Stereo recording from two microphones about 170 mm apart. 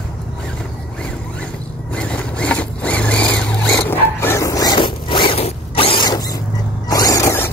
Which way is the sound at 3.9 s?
15° left (ahead or behind).